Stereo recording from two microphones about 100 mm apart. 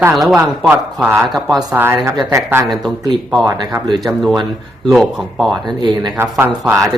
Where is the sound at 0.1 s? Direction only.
Centre (ahead or behind).